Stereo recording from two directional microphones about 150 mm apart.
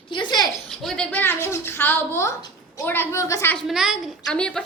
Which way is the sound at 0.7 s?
5° left (ahead or behind).